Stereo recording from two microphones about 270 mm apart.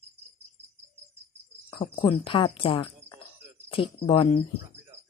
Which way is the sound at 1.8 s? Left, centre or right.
Centre.